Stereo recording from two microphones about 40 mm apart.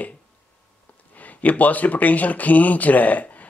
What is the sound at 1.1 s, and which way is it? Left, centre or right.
Speech, left.